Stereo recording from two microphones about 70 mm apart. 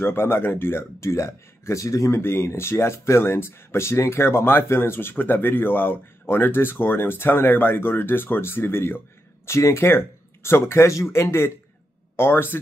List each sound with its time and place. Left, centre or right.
0.0 s speech: left